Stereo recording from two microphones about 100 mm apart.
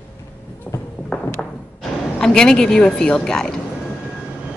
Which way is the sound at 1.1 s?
5° left (ahead or behind).